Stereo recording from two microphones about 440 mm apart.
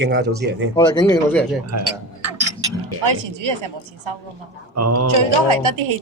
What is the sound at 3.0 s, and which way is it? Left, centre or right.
Speech, right.